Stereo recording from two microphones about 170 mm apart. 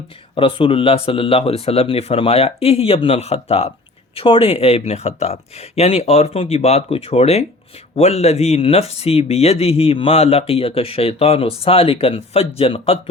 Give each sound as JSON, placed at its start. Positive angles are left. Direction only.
{"t": 0.3, "sound": "speech", "side_deg": 30}